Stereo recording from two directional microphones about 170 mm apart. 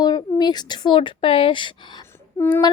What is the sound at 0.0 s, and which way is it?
A woman's voice, 25° left (ahead or behind).